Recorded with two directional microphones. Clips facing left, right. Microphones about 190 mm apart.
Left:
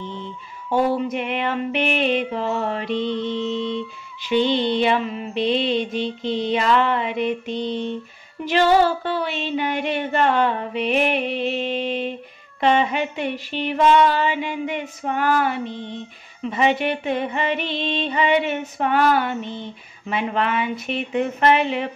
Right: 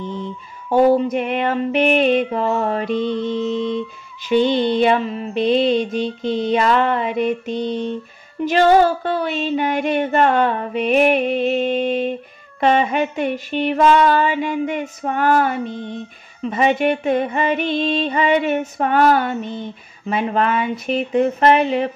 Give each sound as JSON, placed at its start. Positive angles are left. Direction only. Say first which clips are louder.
{"t": 0.7, "sound": "mantra", "louder": "right 6 dB", "side_deg": -40}
{"t": 20.1, "sound": "speech", "louder": "right 4 dB", "side_deg": -40}